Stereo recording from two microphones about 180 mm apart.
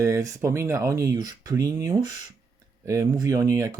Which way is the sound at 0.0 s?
15° right (ahead or behind).